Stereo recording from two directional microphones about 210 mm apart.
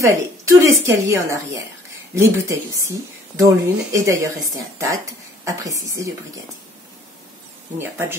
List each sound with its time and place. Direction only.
0.0 s speech: 15° right (ahead or behind)
7.8 s speech: 10° right (ahead or behind)